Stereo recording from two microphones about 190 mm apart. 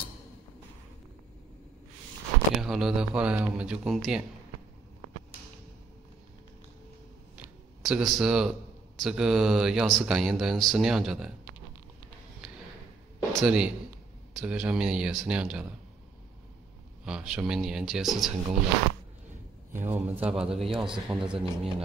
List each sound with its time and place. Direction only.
2.5 s speech: centre (ahead or behind)
7.3 s a sound: 5° right (ahead or behind)
9.0 s speech: 5° right (ahead or behind)
13.3 s speech: centre (ahead or behind)
17.0 s speech: 5° right (ahead or behind)
19.7 s a man's voice: 10° right (ahead or behind)
20.4 s speech: 30° right (ahead or behind)
20.7 s speech: 5° right (ahead or behind)